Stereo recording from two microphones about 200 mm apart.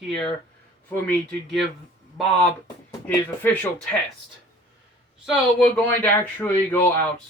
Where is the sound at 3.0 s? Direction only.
10° left (ahead or behind).